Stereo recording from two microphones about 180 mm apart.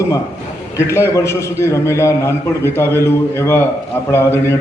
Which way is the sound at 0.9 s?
15° left (ahead or behind).